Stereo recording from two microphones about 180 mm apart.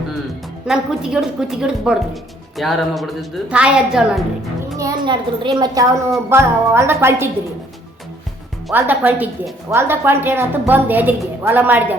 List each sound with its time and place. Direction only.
0.7 s a woman's voice: 5° right (ahead or behind)
4.8 s a woman's voice: 20° right (ahead or behind)
8.7 s a woman's voice: 10° right (ahead or behind)